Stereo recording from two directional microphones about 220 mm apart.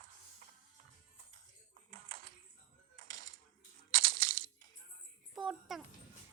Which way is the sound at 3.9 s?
40° right (ahead or behind).